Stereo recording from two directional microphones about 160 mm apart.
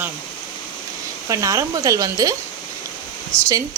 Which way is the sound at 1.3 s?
20° right (ahead or behind).